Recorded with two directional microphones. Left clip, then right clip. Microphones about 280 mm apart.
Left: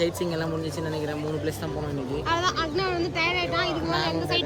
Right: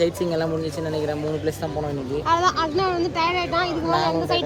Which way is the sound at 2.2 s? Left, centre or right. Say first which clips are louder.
Right 6 dB; centre.